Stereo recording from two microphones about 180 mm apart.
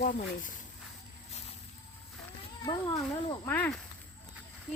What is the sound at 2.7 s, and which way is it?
Speech, 20° left (ahead or behind).